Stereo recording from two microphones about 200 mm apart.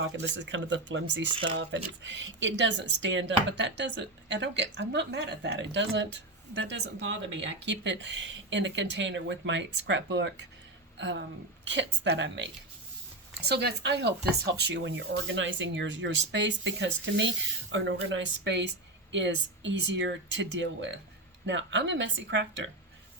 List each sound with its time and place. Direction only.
0.0 s speech: 65° right (ahead or behind)
1.3 s speech: 25° right (ahead or behind)
1.7 s speech: 65° right (ahead or behind)